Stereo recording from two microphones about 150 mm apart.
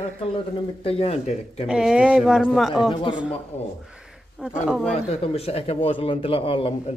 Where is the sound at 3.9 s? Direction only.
5° right (ahead or behind).